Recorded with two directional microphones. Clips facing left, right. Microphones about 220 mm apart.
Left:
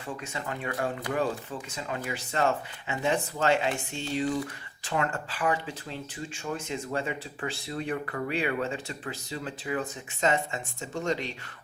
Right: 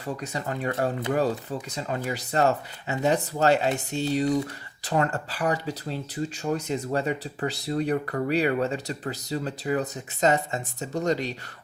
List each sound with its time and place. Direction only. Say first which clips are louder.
0.0 s speech: right 4 dB; 40° right (ahead or behind)